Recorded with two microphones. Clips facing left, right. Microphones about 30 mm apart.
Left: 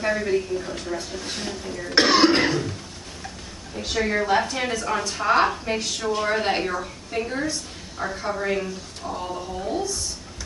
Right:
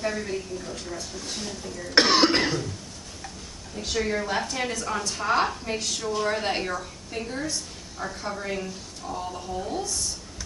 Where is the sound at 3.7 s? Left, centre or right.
Centre.